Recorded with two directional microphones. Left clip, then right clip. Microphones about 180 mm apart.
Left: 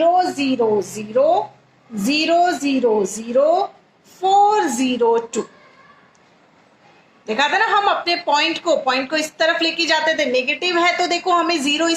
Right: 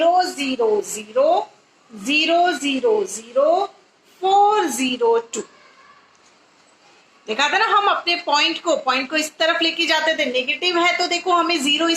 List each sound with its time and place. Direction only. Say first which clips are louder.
0.3 s a woman's voice: left 1 dB; 40° left (ahead or behind)
7.3 s speech: left 1 dB; 40° left (ahead or behind)